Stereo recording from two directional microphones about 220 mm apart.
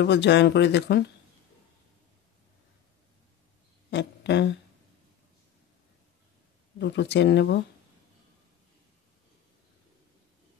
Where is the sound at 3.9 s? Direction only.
50° left (ahead or behind).